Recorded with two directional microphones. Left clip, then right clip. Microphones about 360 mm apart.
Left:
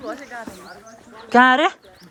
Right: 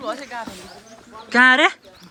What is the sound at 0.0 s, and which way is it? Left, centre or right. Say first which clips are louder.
Speech: right 3 dB; centre.